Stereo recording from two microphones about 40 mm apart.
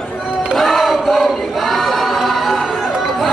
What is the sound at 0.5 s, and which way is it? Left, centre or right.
Choir, centre.